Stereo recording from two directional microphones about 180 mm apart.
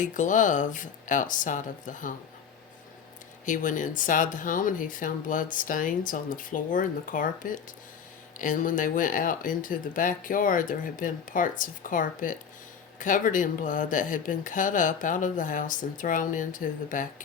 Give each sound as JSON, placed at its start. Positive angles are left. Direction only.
{"t": 0.0, "sound": "speech", "side_deg": 45}
{"t": 3.4, "sound": "speech", "side_deg": 45}